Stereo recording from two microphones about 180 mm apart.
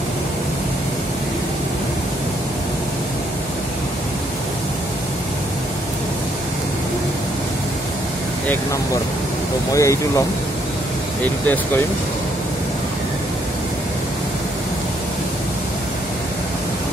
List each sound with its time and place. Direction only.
9.8 s speech: 15° left (ahead or behind)
11.4 s speech: 10° left (ahead or behind)